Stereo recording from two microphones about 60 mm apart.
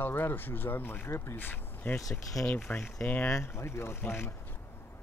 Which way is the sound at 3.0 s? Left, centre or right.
Left.